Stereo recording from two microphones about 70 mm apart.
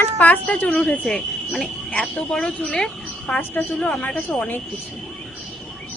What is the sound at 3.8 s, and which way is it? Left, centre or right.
Speech, left.